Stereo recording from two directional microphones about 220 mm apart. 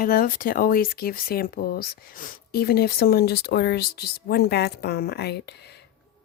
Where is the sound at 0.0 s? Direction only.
40° left (ahead or behind).